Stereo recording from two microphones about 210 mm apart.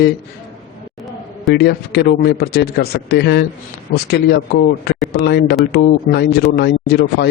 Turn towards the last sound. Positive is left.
turn(degrees=55)  # may be behind; listen again after turning